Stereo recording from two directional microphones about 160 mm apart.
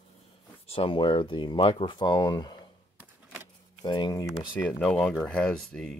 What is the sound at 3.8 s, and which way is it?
Speech, 25° left (ahead or behind).